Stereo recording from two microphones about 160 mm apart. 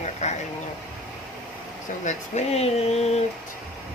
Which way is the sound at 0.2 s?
45° left (ahead or behind).